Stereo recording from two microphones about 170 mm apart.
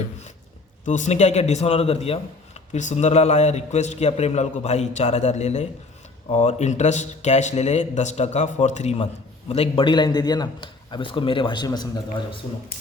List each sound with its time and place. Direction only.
0.9 s a man's voice: 45° left (ahead or behind); by 11.9 s 25° left (ahead or behind)